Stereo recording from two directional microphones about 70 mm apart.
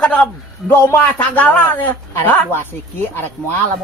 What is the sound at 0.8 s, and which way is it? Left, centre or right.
Speech, left.